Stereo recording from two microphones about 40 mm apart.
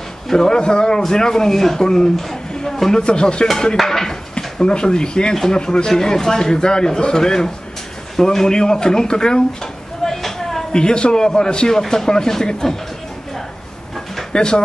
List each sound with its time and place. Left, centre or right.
0.3 s a man's voice: centre
3.0 s speech: left
3.8 s speech: centre
5.3 s a man's voice: centre
5.6 s a man's voice: left
10.0 s a sound: centre
10.7 s a man's voice: left
14.3 s speech: centre